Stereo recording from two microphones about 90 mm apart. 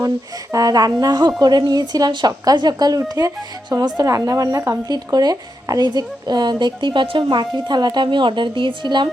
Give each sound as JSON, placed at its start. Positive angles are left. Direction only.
{"t": 0.5, "sound": "speech", "side_deg": -45}